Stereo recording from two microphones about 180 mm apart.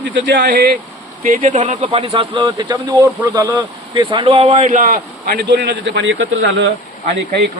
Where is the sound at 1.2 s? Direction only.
45° right (ahead or behind).